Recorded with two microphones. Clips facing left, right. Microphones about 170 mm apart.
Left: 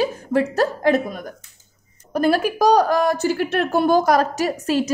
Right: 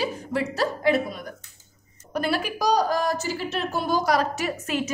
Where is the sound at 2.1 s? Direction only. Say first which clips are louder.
Left 7 dB; 45° left (ahead or behind).